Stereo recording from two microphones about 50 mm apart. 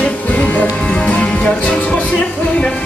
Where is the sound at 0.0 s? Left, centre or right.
Left.